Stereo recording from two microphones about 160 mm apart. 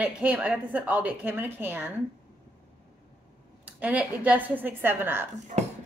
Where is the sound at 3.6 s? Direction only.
10° right (ahead or behind).